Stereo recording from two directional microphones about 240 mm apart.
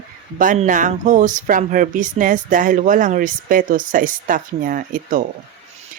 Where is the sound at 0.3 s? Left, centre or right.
Right.